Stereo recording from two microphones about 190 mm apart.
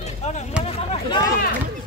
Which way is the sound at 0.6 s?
5° right (ahead or behind).